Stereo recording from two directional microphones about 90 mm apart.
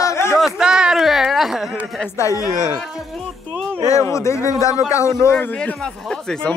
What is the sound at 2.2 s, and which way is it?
Speech, 40° left (ahead or behind).